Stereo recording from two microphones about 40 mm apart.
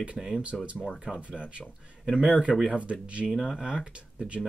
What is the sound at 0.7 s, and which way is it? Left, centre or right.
Speech, centre.